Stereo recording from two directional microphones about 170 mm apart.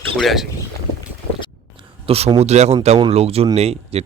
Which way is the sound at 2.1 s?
35° right (ahead or behind).